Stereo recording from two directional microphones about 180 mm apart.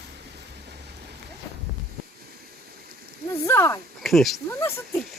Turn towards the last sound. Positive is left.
turn(degrees=0)  # may be behind; listen again after turning